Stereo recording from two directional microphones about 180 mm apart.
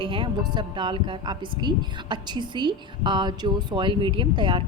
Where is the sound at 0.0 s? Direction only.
30° right (ahead or behind).